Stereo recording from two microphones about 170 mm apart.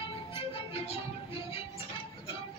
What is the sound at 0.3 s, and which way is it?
Music, 35° left (ahead or behind).